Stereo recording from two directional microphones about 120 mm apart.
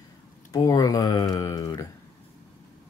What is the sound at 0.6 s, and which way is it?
Speech, 30° left (ahead or behind).